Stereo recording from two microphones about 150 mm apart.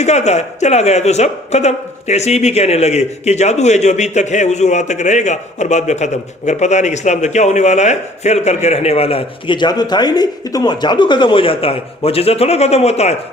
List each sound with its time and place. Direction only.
0.0 s speech: 50° left (ahead or behind)